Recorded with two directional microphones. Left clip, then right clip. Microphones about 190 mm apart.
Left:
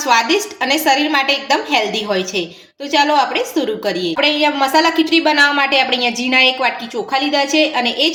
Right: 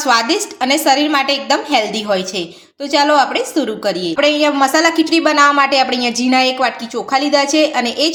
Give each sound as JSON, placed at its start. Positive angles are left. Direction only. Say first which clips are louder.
{"t": 0.0, "sound": "a woman's voice", "louder": "even", "side_deg": -40}